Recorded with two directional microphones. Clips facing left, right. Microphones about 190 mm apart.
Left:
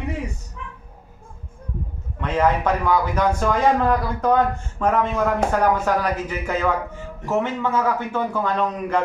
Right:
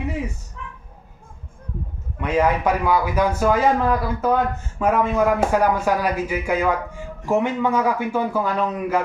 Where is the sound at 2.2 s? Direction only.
10° right (ahead or behind).